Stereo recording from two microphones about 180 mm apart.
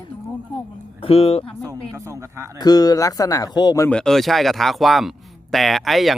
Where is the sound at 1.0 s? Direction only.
30° left (ahead or behind).